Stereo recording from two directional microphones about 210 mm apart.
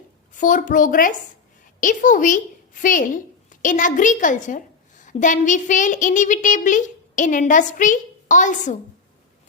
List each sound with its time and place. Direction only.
0.3 s a woman's voice: 40° left (ahead or behind)